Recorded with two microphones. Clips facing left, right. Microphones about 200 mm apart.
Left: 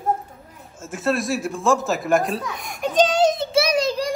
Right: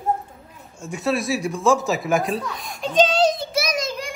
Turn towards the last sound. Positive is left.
turn(degrees=35)  # may be behind; listen again after turning